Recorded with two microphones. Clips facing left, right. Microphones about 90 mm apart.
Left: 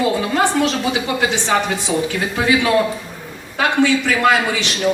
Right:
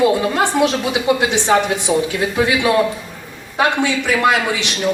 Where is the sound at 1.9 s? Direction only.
30° right (ahead or behind).